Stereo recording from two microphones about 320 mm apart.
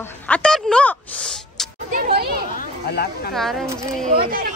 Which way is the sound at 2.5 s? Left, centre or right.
Left.